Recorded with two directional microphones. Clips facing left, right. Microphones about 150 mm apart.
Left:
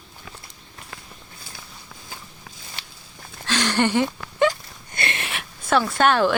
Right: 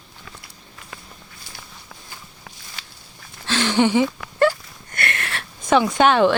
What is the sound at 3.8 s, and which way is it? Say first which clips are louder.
Speech: right 4 dB; 10° right (ahead or behind).